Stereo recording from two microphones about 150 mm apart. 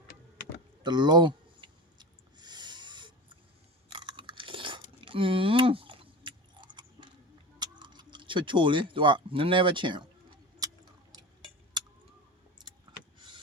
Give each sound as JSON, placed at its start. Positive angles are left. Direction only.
{"t": 0.8, "sound": "a sound", "side_deg": -30}
{"t": 3.9, "sound": "chewing", "side_deg": -35}
{"t": 7.6, "sound": "tick-tock", "side_deg": -30}